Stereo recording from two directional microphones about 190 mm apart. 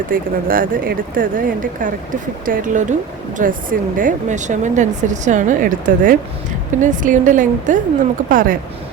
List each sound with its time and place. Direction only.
0.1 s speech: 50° right (ahead or behind)